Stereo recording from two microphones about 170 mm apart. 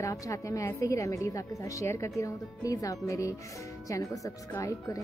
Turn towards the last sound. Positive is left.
turn(degrees=20)  # may be behind; listen again after turning